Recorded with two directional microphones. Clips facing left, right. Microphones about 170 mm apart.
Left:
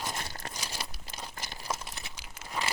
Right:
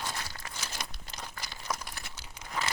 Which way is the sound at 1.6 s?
25° left (ahead or behind).